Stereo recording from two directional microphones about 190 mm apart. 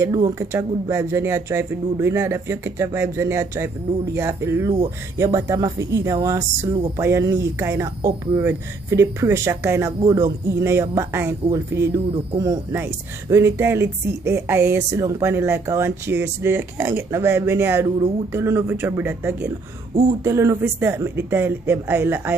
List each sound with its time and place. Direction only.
0.0 s speech: 15° right (ahead or behind)